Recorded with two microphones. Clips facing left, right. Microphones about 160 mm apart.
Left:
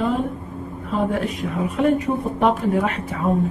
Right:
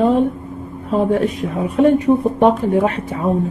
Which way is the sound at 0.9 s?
35° right (ahead or behind).